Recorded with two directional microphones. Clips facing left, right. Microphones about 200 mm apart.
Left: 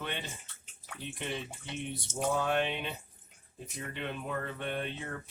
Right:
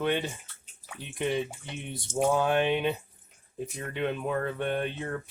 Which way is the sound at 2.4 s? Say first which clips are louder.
Right 6 dB; 55° right (ahead or behind).